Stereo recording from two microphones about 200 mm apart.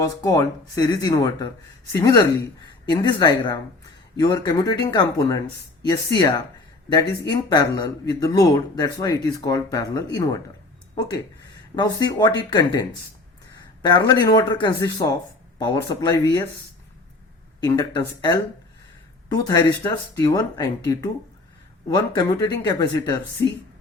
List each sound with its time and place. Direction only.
0.0 s speech: 15° left (ahead or behind)
11.8 s speech: 20° left (ahead or behind)
13.8 s speech: 20° left (ahead or behind)
17.6 s speech: 20° left (ahead or behind)